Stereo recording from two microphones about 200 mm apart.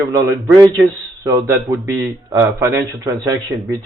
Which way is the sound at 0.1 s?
15° right (ahead or behind).